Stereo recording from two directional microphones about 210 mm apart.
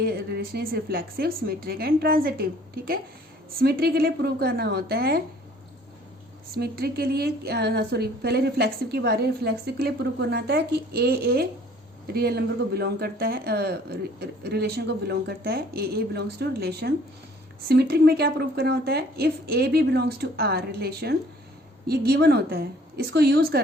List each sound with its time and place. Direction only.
0.0 s a woman's voice: 50° right (ahead or behind)
6.5 s a woman's voice: 45° right (ahead or behind)